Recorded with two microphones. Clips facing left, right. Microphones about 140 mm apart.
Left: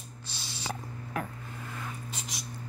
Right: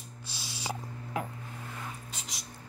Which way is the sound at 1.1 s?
20° right (ahead or behind).